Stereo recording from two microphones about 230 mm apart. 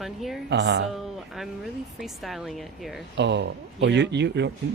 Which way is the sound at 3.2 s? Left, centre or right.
Right.